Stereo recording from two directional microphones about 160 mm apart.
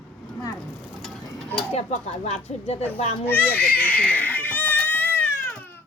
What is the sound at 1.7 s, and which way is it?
A child's voice, 45° left (ahead or behind).